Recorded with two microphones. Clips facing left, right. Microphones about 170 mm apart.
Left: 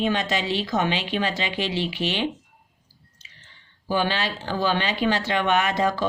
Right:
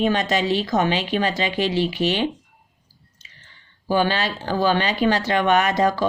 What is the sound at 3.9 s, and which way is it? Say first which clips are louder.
Speech: right 4 dB; 45° right (ahead or behind).